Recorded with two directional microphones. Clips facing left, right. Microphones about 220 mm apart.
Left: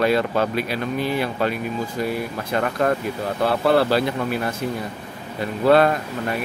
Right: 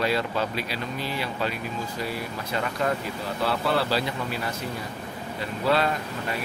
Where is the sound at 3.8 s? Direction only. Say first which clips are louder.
Left 7 dB; 55° left (ahead or behind).